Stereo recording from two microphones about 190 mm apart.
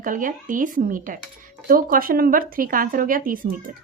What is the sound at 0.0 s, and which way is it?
Speech, 45° right (ahead or behind).